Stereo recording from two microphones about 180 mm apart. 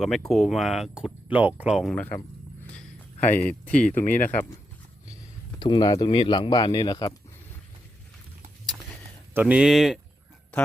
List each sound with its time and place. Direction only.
0.3 s speech: centre (ahead or behind)
2.7 s a sound: 10° left (ahead or behind)
4.1 s speech: 10° left (ahead or behind)
5.5 s speech: 25° left (ahead or behind)
8.6 s a sound: 5° left (ahead or behind)
9.3 s speech: 10° right (ahead or behind)